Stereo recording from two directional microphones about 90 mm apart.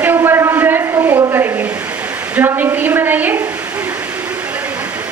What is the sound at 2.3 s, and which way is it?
A woman's voice, 20° right (ahead or behind).